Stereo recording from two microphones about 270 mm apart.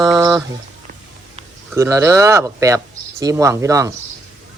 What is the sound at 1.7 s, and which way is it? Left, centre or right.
Speech, centre.